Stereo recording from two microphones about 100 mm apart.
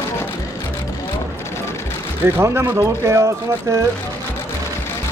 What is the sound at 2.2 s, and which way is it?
Speech, 25° right (ahead or behind).